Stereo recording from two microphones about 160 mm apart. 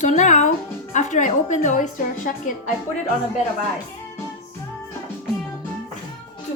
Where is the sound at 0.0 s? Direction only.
50° left (ahead or behind).